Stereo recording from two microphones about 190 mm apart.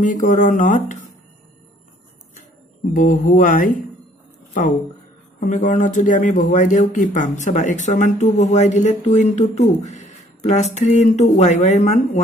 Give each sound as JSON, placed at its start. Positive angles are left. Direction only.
{"t": 0.0, "sound": "speech", "side_deg": 40}
{"t": 2.3, "sound": "speech", "side_deg": 45}
{"t": 5.4, "sound": "speech", "side_deg": 40}